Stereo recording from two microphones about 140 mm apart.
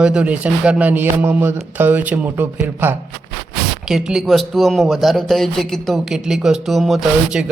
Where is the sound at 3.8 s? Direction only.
5° right (ahead or behind).